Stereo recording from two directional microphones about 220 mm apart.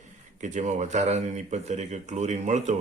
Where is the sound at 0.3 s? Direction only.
35° right (ahead or behind).